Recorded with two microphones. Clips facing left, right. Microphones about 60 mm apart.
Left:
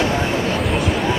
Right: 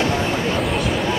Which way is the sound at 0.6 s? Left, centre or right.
Centre.